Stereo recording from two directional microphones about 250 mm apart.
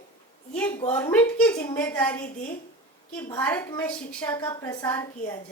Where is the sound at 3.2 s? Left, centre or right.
Centre.